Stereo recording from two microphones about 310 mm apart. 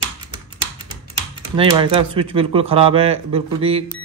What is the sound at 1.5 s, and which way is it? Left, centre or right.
Speech, centre.